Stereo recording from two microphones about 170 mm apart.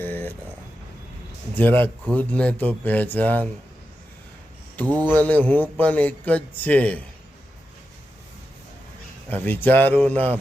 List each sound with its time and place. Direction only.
0.0 s a sound: 10° left (ahead or behind)
1.5 s a man's voice: 10° left (ahead or behind)
4.8 s a man's voice: 10° left (ahead or behind)
9.3 s a man's voice: 10° left (ahead or behind)